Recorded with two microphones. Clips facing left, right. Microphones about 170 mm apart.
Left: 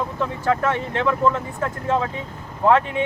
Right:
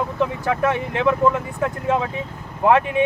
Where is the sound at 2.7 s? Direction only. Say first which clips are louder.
Right 1 dB; 15° right (ahead or behind).